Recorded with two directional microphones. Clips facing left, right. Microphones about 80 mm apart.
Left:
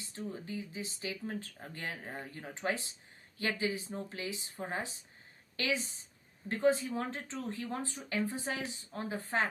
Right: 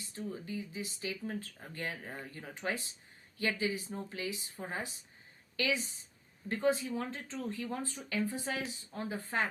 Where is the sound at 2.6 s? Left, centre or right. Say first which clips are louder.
Left 2 dB; left.